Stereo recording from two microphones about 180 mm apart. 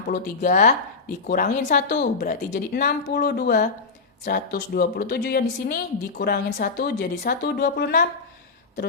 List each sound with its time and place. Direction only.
0.1 s speech: 55° left (ahead or behind)
2.0 s a woman's voice: 65° left (ahead or behind)
4.3 s speech: 45° left (ahead or behind)
4.7 s speech: 60° left (ahead or behind)